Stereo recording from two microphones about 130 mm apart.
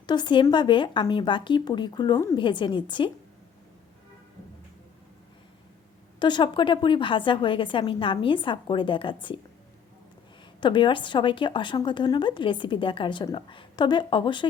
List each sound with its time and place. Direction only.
0.0 s a woman's voice: 35° left (ahead or behind)
6.1 s a woman's voice: 35° left (ahead or behind)
10.6 s a woman's voice: 40° left (ahead or behind)